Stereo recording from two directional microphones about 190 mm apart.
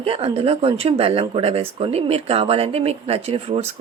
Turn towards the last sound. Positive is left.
turn(degrees=-30)  # may be behind; listen again after turning